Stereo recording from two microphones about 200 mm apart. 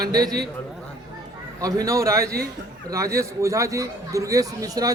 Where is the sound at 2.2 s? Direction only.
50° right (ahead or behind).